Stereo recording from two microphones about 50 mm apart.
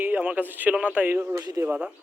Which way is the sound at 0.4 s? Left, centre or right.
Right.